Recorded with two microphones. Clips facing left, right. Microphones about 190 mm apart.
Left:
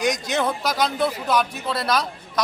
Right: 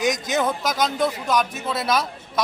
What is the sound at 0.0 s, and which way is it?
Speech, centre (ahead or behind).